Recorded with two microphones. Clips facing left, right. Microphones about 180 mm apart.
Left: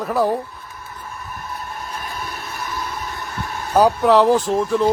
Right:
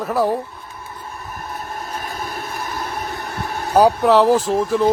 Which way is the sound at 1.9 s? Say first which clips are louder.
Right 4 dB; 40° right (ahead or behind).